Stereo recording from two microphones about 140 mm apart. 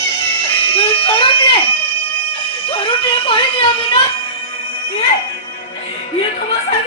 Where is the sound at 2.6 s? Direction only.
40° left (ahead or behind).